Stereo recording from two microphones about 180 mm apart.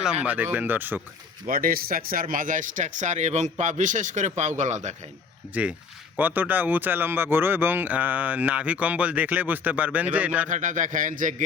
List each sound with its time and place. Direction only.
0.0 s speech: 5° right (ahead or behind)
1.5 s a man's voice: 50° right (ahead or behind)
6.1 s speech: 10° right (ahead or behind)
10.5 s a man's voice: 45° right (ahead or behind)